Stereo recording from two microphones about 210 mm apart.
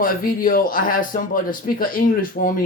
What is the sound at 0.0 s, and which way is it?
Speech, 40° left (ahead or behind).